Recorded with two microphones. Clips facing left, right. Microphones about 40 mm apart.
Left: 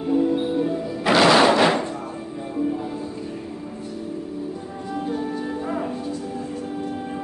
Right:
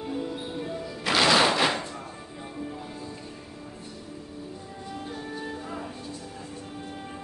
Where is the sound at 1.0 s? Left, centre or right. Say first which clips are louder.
Left 6 dB; centre.